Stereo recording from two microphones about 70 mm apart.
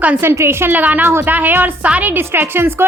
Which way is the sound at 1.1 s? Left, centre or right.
Right.